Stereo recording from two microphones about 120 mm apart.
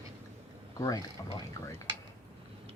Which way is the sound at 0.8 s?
30° left (ahead or behind).